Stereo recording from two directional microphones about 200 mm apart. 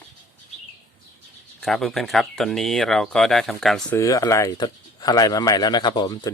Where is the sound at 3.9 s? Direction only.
15° left (ahead or behind).